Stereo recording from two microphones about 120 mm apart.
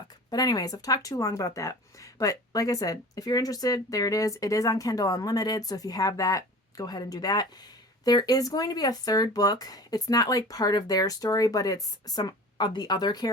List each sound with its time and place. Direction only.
0.3 s speech: 30° left (ahead or behind)